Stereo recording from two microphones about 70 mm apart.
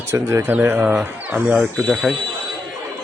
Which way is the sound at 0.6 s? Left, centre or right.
Right.